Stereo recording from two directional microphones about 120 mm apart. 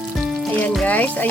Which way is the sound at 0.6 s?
10° left (ahead or behind).